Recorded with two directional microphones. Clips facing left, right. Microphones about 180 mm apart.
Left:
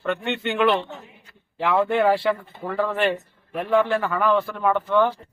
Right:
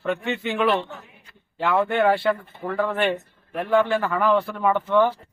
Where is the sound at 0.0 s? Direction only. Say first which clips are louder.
Even; centre (ahead or behind).